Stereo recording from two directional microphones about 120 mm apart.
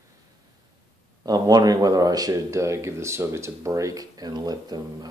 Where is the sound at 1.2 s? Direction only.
30° right (ahead or behind).